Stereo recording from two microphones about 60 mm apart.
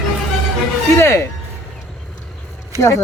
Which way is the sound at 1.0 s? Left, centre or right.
Left.